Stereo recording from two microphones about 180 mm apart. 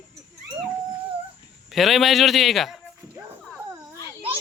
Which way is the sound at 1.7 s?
Centre (ahead or behind).